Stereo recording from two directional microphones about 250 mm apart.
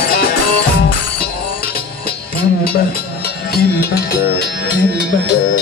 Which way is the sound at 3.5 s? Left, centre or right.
Left.